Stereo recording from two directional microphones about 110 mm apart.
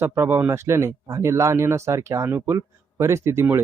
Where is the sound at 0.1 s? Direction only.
20° right (ahead or behind).